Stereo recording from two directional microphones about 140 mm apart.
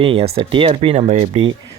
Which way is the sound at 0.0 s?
45° right (ahead or behind).